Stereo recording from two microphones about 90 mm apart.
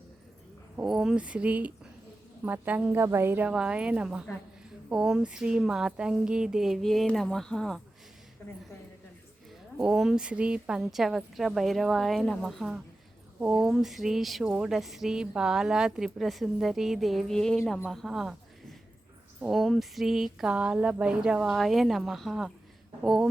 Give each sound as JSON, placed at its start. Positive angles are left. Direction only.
{"t": 0.9, "sound": "speech", "side_deg": -5}
{"t": 3.4, "sound": "a woman's voice", "side_deg": -10}
{"t": 9.8, "sound": "a woman's voice", "side_deg": -5}
{"t": 17.9, "sound": "a sound", "side_deg": -5}
{"t": 19.5, "sound": "a woman's voice", "side_deg": 0}